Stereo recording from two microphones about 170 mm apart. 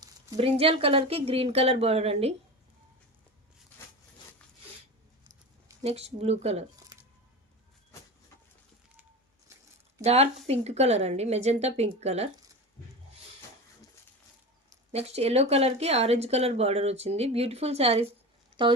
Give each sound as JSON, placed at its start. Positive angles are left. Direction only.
{"t": 0.3, "sound": "speech", "side_deg": -35}
{"t": 5.8, "sound": "speech", "side_deg": -40}
{"t": 10.0, "sound": "speech", "side_deg": -40}
{"t": 14.9, "sound": "speech", "side_deg": -40}